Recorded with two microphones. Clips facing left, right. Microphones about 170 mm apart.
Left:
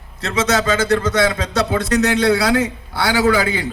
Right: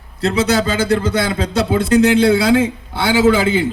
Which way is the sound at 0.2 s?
35° right (ahead or behind).